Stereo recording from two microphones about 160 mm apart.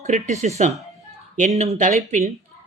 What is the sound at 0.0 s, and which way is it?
Speech, 45° right (ahead or behind).